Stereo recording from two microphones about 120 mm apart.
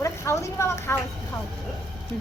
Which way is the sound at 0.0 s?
25° left (ahead or behind).